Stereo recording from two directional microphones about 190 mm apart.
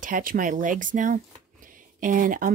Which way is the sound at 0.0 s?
45° right (ahead or behind).